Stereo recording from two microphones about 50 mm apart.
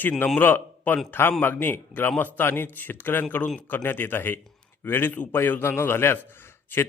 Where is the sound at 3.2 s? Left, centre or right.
Left.